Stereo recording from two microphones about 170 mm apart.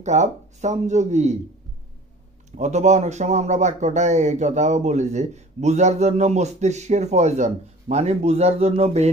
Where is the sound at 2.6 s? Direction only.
40° right (ahead or behind).